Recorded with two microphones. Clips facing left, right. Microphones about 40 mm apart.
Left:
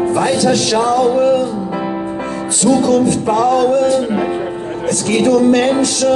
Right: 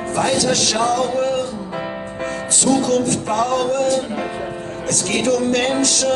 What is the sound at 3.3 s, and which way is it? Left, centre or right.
Music, left.